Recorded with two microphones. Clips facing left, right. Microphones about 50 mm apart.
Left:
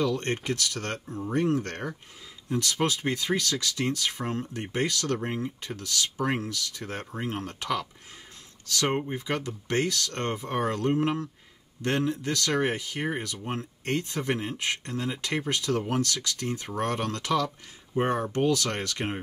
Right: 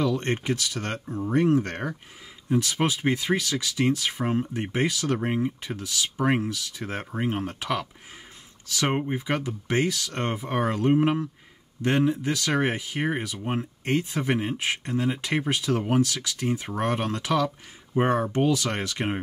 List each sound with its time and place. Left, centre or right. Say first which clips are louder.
0.0 s speech: right 2 dB; right